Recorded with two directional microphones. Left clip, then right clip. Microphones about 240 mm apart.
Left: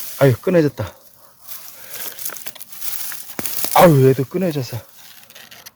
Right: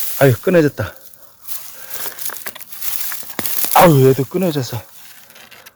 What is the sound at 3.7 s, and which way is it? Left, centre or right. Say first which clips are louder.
Speech: right 1 dB; centre.